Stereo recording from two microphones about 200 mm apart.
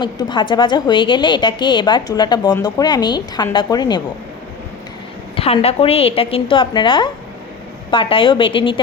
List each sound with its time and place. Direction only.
0.0 s a woman's voice: 20° left (ahead or behind)
5.4 s a woman's voice: 30° left (ahead or behind)